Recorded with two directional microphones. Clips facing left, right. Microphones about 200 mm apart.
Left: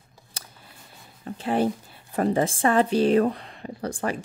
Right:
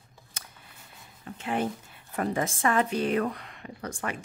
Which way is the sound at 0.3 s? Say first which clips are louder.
Left 3 dB; 35° left (ahead or behind).